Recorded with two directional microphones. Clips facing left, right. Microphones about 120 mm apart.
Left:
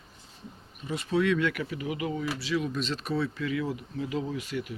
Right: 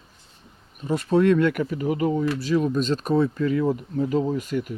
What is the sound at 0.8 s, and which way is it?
Speech, 45° right (ahead or behind).